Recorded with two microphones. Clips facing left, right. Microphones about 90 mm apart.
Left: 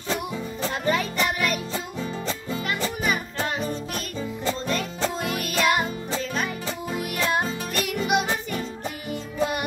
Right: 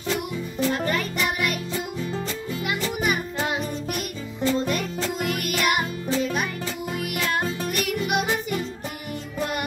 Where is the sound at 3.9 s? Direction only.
30° left (ahead or behind).